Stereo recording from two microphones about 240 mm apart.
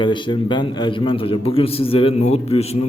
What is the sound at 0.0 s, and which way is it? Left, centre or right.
A man's voice, centre.